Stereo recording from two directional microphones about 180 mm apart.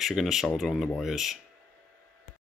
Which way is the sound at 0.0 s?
Centre (ahead or behind).